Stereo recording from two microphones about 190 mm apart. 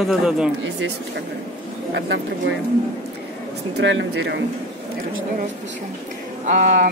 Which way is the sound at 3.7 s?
70° right (ahead or behind).